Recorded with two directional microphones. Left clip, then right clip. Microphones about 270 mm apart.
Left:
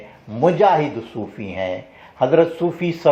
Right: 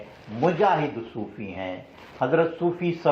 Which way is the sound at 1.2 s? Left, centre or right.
Left.